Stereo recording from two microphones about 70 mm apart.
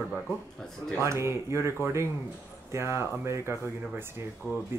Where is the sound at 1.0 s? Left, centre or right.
Right.